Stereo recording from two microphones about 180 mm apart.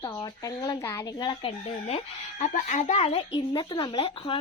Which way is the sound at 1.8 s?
40° left (ahead or behind).